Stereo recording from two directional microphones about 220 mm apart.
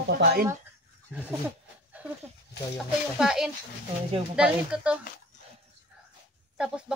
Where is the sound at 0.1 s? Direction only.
45° right (ahead or behind).